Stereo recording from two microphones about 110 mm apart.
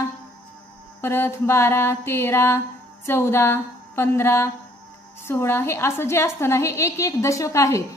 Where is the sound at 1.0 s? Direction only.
20° left (ahead or behind).